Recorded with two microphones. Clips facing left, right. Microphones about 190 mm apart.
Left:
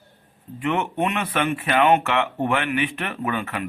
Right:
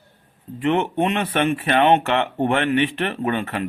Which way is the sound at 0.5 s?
30° right (ahead or behind).